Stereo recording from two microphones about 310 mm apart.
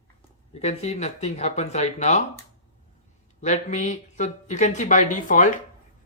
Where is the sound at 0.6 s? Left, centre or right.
Left.